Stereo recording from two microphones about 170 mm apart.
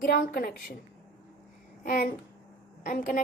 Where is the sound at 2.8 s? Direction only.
50° left (ahead or behind).